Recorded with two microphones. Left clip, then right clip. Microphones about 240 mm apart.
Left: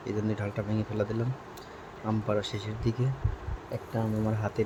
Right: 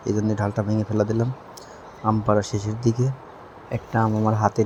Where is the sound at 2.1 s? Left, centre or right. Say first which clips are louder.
Right 9 dB; centre.